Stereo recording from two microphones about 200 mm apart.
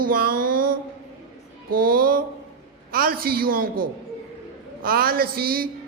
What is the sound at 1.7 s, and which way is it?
A woman's voice, 45° right (ahead or behind).